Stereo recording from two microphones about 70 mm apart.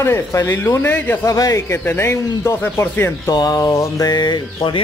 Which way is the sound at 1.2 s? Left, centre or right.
Left.